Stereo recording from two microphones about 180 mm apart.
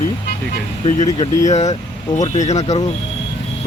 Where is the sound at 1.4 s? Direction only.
40° left (ahead or behind).